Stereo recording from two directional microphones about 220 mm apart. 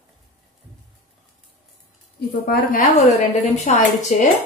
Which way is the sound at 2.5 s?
40° left (ahead or behind).